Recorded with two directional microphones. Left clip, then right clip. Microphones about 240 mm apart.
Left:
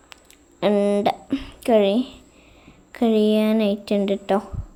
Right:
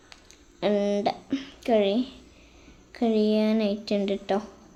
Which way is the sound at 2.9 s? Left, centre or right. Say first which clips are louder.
Left 5 dB; centre.